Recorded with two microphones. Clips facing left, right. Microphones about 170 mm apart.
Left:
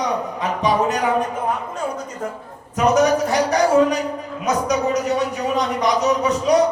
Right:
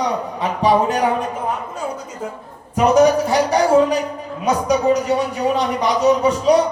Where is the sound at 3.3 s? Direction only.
30° right (ahead or behind).